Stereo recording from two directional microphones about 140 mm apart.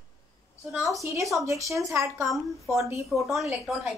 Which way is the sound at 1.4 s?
20° right (ahead or behind).